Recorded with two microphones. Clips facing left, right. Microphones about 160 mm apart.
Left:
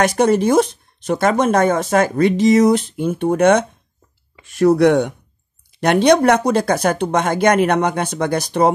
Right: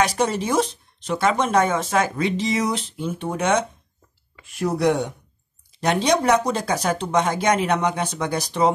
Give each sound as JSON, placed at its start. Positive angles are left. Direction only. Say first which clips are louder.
{"t": 0.0, "sound": "speech", "louder": "left 7 dB", "side_deg": 55}
{"t": 4.5, "sound": "speech", "louder": "left 8 dB", "side_deg": 75}